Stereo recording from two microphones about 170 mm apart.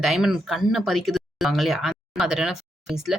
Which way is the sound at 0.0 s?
Centre (ahead or behind).